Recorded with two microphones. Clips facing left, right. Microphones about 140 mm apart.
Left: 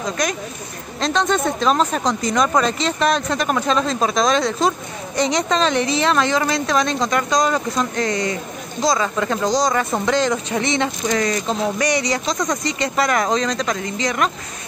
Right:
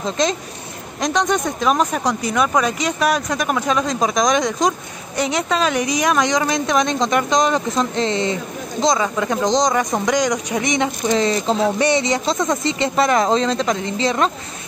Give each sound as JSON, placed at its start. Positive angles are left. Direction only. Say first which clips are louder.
{"t": 0.2, "sound": "speech", "louder": "right 3 dB", "side_deg": -25}